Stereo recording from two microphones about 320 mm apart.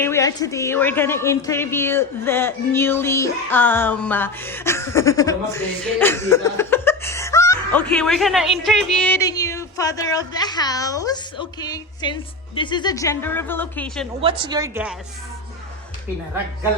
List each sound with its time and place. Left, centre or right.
0.0 s a woman's voice: centre
14.2 s a woman's voice: centre